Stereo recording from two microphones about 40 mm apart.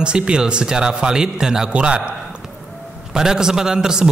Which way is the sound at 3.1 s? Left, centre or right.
Centre.